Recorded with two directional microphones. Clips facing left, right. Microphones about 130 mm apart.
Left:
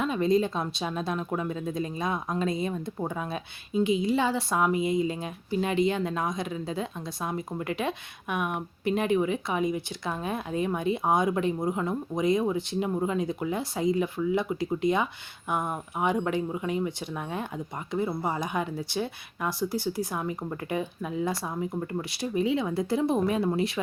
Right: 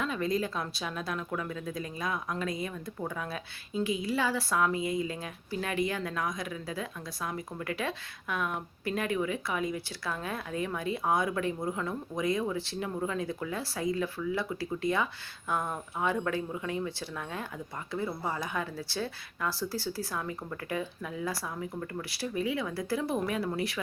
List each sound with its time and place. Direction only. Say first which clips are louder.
0.0 s speech: left 6 dB; 20° left (ahead or behind)